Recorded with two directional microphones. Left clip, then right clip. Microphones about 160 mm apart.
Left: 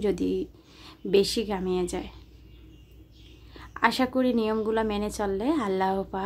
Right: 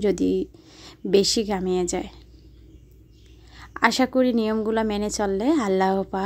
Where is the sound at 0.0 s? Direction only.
40° right (ahead or behind).